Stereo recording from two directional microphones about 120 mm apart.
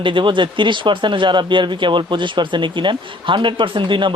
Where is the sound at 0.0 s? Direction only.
45° right (ahead or behind).